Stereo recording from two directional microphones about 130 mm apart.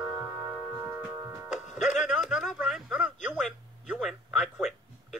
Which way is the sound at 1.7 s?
Centre (ahead or behind).